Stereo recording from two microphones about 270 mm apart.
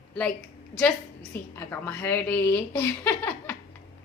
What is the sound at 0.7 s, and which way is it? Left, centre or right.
A woman's voice, centre.